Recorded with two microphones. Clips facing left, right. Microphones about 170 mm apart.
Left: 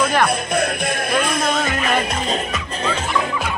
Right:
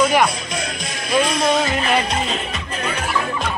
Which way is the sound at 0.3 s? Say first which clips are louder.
Left 7 dB; 55° left (ahead or behind).